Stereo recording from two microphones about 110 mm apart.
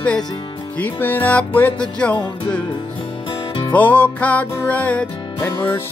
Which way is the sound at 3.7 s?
15° left (ahead or behind).